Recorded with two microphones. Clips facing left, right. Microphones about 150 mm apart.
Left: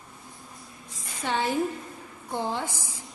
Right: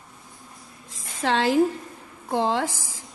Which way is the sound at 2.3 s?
90° right.